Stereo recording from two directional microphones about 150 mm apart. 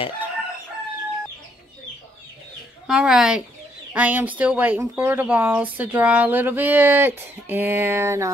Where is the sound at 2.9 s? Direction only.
5° right (ahead or behind).